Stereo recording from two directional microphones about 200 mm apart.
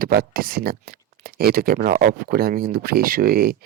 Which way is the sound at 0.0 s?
50° right (ahead or behind).